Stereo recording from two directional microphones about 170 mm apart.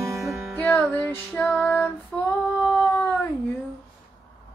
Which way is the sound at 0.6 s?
10° left (ahead or behind).